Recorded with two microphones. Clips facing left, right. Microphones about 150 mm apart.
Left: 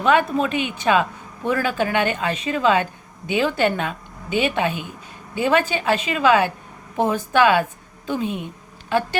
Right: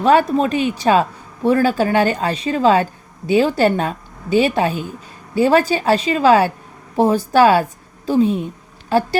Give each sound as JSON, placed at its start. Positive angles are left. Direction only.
{"t": 0.0, "sound": "a woman's voice", "side_deg": -35}